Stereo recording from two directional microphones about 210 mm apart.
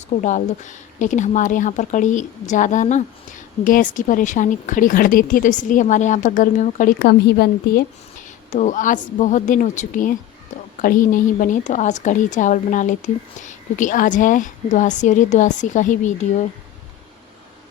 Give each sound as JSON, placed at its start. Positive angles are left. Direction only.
{"t": 0.2, "sound": "speech", "side_deg": 35}
{"t": 7.0, "sound": "a woman's voice", "side_deg": 50}
{"t": 8.4, "sound": "speech", "side_deg": 35}